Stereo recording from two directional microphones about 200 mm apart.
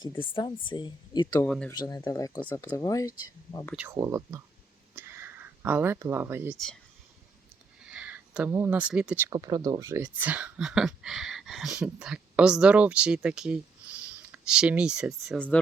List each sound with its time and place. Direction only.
0.2 s a woman's voice: 25° left (ahead or behind)
1.5 s speech: 5° left (ahead or behind)
1.7 s a woman's voice: 20° left (ahead or behind)
3.8 s speech: 15° right (ahead or behind)
4.9 s a sound: 10° right (ahead or behind)
7.9 s speech: 5° right (ahead or behind)